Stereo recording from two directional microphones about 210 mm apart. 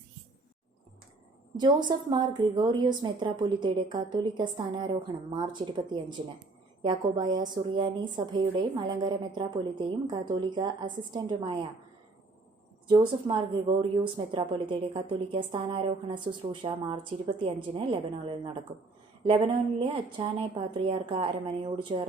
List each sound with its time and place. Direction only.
1.5 s a woman's voice: 20° right (ahead or behind)
13.2 s a woman's voice: 25° right (ahead or behind)